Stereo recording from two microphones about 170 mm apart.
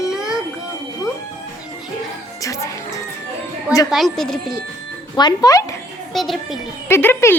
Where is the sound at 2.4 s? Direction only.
20° left (ahead or behind).